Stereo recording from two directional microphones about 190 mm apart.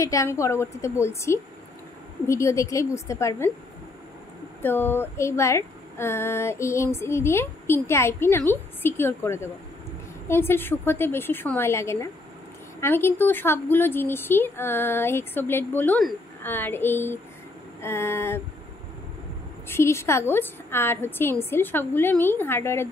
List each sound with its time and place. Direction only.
0.0 s speech: 15° left (ahead or behind)
4.6 s speech: 10° left (ahead or behind)
19.7 s speech: 15° left (ahead or behind)